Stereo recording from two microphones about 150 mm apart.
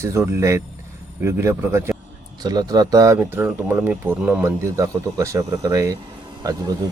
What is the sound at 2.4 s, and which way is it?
Speech, 25° right (ahead or behind).